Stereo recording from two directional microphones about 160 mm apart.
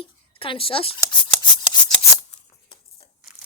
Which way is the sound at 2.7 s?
40° left (ahead or behind).